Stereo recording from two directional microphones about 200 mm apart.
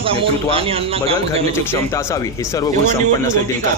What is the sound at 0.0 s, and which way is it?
Speech, 30° right (ahead or behind).